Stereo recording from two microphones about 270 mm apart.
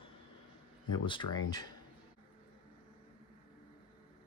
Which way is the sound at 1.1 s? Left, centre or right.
Centre.